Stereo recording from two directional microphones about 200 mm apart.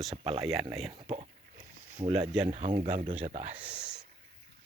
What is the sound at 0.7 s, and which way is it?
Speech, centre (ahead or behind).